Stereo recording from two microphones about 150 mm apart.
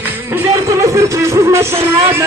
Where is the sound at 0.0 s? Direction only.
15° right (ahead or behind).